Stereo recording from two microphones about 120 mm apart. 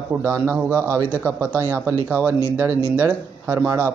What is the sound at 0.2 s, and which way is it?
A man's voice, 15° right (ahead or behind).